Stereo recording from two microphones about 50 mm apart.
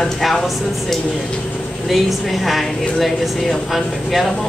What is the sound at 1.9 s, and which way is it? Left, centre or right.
Speech, centre.